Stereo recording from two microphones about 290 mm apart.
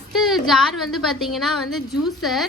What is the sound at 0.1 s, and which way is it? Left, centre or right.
A woman's voice, centre.